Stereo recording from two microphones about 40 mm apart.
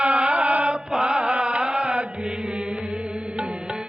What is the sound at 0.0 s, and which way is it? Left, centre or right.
Mantra, right.